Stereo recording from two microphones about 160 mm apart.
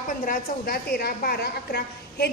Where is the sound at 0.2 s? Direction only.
60° left (ahead or behind).